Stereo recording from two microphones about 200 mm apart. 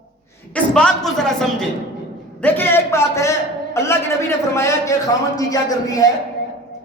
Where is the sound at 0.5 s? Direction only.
5° left (ahead or behind).